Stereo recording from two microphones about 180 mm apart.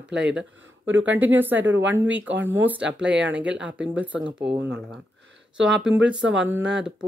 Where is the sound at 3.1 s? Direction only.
80° right.